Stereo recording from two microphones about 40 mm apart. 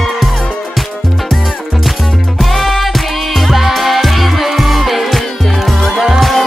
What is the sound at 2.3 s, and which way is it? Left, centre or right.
Music, centre.